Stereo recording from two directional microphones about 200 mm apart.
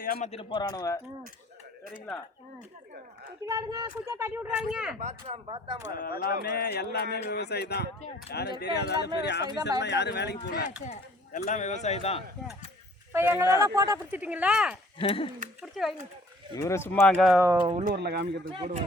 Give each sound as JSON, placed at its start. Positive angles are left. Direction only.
{"t": 0.0, "sound": "a man's voice", "side_deg": 45}
{"t": 0.3, "sound": "speech", "side_deg": 25}
{"t": 3.4, "sound": "a woman's voice", "side_deg": -15}
{"t": 4.9, "sound": "speech", "side_deg": -30}
{"t": 5.9, "sound": "speech", "side_deg": 45}
{"t": 10.5, "sound": "speech", "side_deg": 45}
{"t": 13.1, "sound": "a woman's voice", "side_deg": -10}
{"t": 15.0, "sound": "speech", "side_deg": 25}
{"t": 15.6, "sound": "speech", "side_deg": 0}
{"t": 16.6, "sound": "speech", "side_deg": 15}
{"t": 17.4, "sound": "a woman's voice", "side_deg": -15}
{"t": 17.9, "sound": "speech", "side_deg": -55}
{"t": 18.4, "sound": "speech", "side_deg": -25}